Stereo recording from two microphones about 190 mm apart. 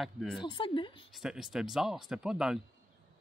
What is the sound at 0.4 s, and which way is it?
Speech, 25° left (ahead or behind).